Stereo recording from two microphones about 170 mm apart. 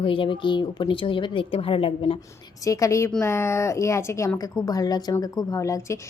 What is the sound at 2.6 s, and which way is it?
A woman's voice, 20° left (ahead or behind).